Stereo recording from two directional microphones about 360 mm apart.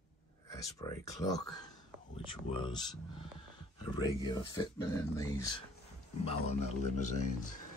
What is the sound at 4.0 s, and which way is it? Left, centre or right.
Speech, centre.